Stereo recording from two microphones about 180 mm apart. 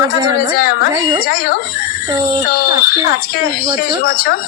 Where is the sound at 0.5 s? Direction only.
55° left (ahead or behind).